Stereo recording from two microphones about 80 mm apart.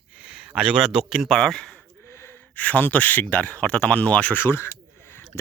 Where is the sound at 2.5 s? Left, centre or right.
Centre.